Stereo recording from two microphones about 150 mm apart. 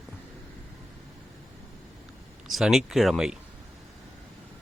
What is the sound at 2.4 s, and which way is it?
Speech, centre (ahead or behind).